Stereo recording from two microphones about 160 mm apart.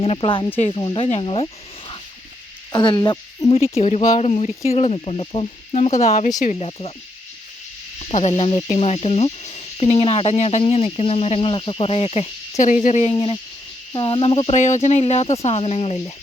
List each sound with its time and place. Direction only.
0.0 s speech: 35° left (ahead or behind)
2.7 s hoot: 30° left (ahead or behind)
3.5 s speech: 40° left (ahead or behind)
7.9 s speech: 45° left (ahead or behind)
12.5 s speech: 50° left (ahead or behind)
13.1 s hoot: 25° left (ahead or behind)
13.9 s speech: 30° left (ahead or behind)
14.5 s speech: 45° left (ahead or behind)